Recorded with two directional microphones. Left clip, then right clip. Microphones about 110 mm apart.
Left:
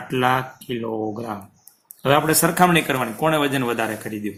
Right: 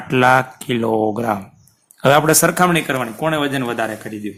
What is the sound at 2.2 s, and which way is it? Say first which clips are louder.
Speech: right 5 dB; 80° right.